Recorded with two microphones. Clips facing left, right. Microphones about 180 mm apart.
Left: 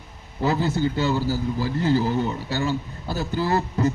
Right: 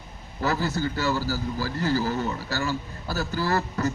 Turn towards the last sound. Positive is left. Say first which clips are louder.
# left 3 dB
turn(degrees=25)  # may be behind; listen again after turning